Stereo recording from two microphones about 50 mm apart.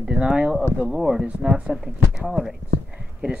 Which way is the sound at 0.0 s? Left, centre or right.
Right.